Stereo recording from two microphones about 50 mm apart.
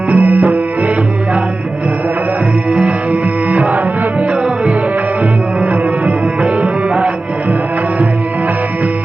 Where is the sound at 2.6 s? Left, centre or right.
Right.